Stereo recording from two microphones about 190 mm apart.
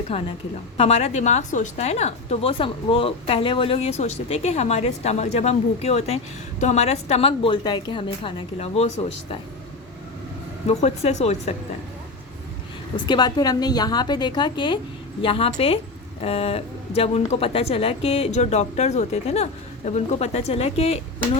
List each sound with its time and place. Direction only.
0.1 s a woman's voice: 30° left (ahead or behind)
10.7 s a woman's voice: 35° left (ahead or behind)
13.1 s a woman's voice: 20° left (ahead or behind)